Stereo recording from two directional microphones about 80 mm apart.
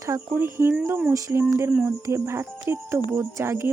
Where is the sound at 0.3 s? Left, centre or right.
Right.